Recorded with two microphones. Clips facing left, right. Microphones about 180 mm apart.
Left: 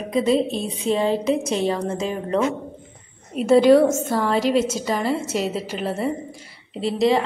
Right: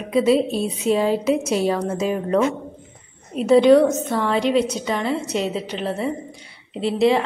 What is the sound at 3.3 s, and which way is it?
A woman's voice, centre (ahead or behind).